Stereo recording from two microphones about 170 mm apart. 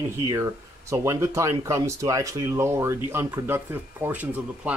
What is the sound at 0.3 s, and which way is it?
Speech, 15° right (ahead or behind).